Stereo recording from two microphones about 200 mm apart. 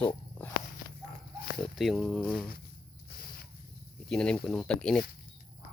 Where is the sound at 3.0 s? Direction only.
50° left (ahead or behind).